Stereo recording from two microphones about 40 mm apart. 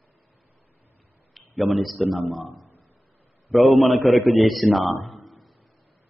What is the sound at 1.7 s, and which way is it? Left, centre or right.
Speech, centre.